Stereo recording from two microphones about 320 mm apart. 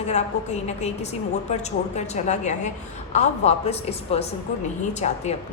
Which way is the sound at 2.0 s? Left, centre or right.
Left.